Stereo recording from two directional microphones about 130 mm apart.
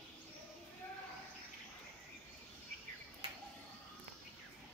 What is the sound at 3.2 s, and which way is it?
Bird, 40° right (ahead or behind).